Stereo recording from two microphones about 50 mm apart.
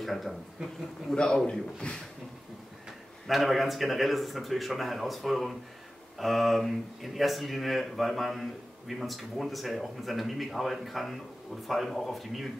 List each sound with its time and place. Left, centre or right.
0.0 s speech: centre
0.6 s a man's voice: centre
1.1 s a man's voice: centre
3.3 s speech: centre